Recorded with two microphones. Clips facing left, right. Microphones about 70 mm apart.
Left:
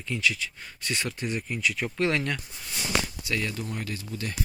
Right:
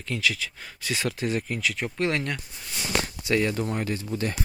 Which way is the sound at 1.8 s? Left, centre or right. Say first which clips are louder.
Left 1 dB; right.